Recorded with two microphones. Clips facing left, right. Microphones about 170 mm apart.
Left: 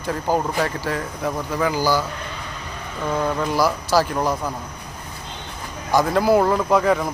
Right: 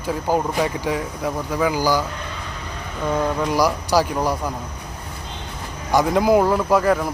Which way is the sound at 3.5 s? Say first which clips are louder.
Even; 15° right (ahead or behind).